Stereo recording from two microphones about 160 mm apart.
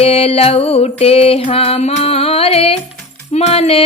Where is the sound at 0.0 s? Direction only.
35° left (ahead or behind).